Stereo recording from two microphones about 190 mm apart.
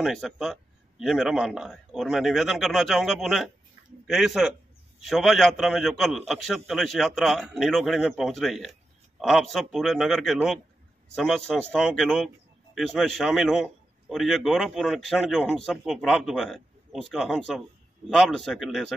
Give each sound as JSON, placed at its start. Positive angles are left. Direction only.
{"t": 0.0, "sound": "a man's voice", "side_deg": 0}